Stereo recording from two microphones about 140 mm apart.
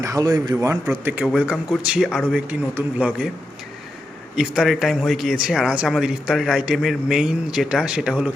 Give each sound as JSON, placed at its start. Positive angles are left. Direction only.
{"t": 0.0, "sound": "a man's voice", "side_deg": -25}
{"t": 4.4, "sound": "speech", "side_deg": -5}